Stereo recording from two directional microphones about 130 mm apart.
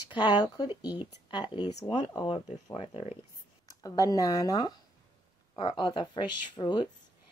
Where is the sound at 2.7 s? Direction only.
50° left (ahead or behind).